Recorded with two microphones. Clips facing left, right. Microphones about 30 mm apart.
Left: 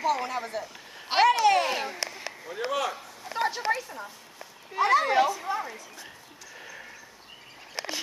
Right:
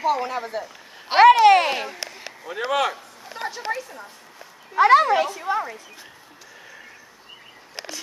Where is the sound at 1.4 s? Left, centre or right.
Right.